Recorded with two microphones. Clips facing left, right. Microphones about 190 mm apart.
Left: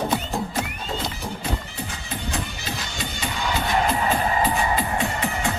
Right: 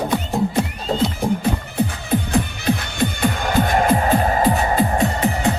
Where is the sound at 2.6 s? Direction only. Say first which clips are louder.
Right 11 dB; 60° right (ahead or behind).